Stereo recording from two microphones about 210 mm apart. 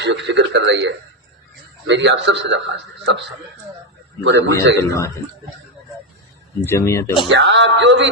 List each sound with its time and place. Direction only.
0.0 s radio: 60° right (ahead or behind)
1.9 s a man's voice: 60° right (ahead or behind)
4.2 s a man's voice: 55° right (ahead or behind)
4.8 s speech: 15° left (ahead or behind)
6.7 s speech: 15° left (ahead or behind)
7.3 s a man's voice: 60° right (ahead or behind)